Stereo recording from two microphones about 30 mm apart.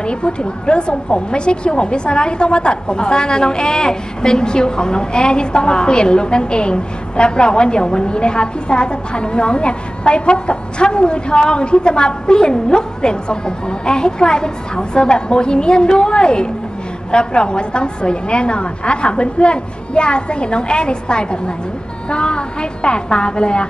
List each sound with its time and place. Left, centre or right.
0.0 s a woman's voice: left